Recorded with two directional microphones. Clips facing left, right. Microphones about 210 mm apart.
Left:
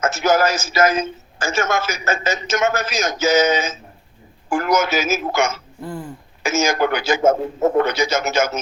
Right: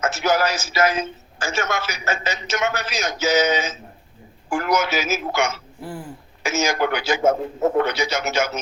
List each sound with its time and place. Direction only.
0.0 s a man's voice: 45° left (ahead or behind)